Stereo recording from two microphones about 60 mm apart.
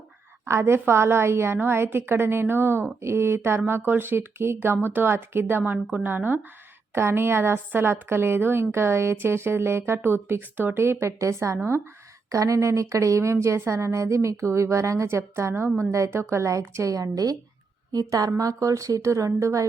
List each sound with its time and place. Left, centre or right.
0.4 s a woman's voice: right
6.9 s a woman's voice: right
11.0 s a woman's voice: right
12.3 s a woman's voice: right
16.4 s speech: right
18.1 s speech: right